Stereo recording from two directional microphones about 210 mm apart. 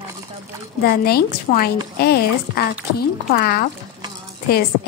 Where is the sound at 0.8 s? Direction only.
50° left (ahead or behind).